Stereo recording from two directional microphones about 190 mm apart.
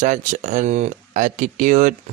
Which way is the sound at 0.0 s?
40° right (ahead or behind).